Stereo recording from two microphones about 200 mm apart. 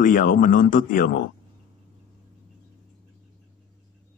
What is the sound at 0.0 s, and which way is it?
Speech, 45° left (ahead or behind).